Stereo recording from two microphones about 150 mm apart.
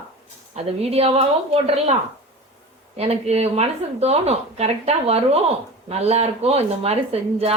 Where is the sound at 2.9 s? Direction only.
45° right (ahead or behind).